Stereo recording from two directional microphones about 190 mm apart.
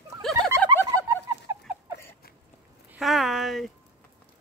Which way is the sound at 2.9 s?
Centre (ahead or behind).